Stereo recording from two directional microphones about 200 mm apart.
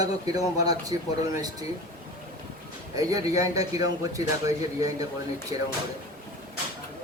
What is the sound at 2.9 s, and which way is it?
A man's voice, 15° right (ahead or behind).